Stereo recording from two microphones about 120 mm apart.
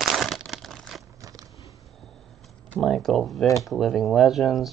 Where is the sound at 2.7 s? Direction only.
Centre (ahead or behind).